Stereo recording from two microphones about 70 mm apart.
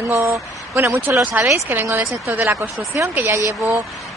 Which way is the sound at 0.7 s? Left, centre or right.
Right.